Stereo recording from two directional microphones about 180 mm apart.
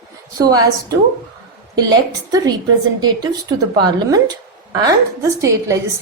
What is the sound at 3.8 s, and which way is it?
Speech, 20° right (ahead or behind).